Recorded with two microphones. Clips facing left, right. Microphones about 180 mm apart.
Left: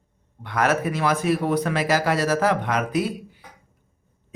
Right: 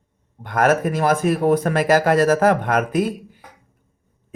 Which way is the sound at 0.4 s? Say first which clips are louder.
Right 4 dB; 50° right (ahead or behind).